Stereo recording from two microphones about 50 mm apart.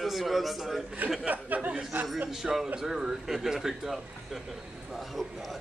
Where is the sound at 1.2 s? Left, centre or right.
Right.